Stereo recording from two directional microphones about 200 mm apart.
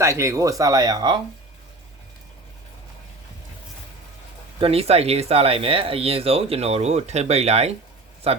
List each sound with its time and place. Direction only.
0.0 s speech: 15° right (ahead or behind)
4.6 s speech: 30° right (ahead or behind)